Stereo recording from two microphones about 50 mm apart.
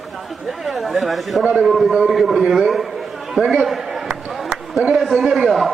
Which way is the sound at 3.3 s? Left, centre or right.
Centre.